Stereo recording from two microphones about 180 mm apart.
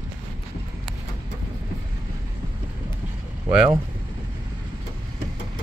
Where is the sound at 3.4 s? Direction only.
10° right (ahead or behind).